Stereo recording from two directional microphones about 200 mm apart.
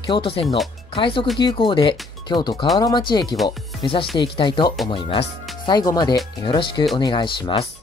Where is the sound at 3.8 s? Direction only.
25° left (ahead or behind).